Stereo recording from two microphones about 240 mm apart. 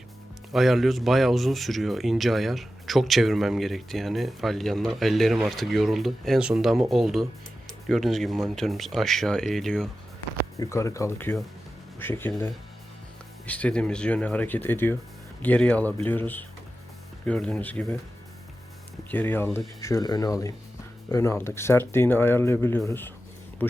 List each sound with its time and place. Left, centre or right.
0.5 s speech: centre
10.6 s speech: centre
13.5 s speech: centre
19.1 s speech: centre